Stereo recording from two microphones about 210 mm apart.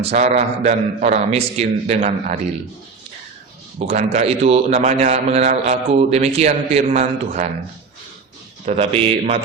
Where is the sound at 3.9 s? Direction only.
30° right (ahead or behind).